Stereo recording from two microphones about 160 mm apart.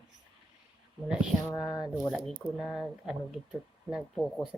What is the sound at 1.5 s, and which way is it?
Speech, 25° left (ahead or behind).